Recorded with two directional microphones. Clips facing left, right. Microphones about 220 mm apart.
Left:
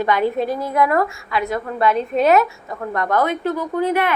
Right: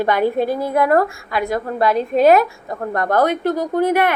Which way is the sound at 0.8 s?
45° right (ahead or behind).